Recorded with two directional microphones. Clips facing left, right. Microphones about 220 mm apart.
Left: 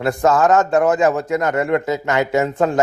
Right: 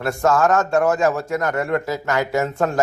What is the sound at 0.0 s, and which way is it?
A man's voice, 15° left (ahead or behind).